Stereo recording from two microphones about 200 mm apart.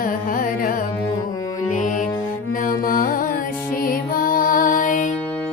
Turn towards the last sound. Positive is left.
turn(degrees=40)  # may be behind; listen again after turning